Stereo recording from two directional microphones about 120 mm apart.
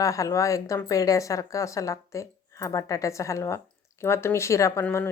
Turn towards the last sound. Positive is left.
turn(degrees=25)  # may be behind; listen again after turning